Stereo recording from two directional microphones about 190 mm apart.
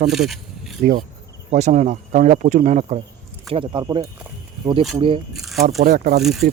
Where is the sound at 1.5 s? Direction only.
35° right (ahead or behind).